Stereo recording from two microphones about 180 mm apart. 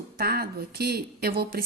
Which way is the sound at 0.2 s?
60° right (ahead or behind).